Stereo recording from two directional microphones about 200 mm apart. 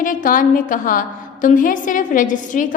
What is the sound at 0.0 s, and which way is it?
A woman's voice, 40° left (ahead or behind).